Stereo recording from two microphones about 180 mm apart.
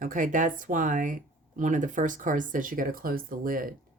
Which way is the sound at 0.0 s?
45° right (ahead or behind).